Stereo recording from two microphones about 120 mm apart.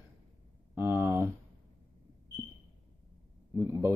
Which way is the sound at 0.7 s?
20° right (ahead or behind).